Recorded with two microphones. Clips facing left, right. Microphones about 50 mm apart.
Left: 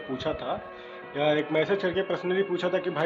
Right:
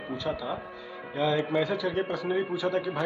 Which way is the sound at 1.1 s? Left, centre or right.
Left.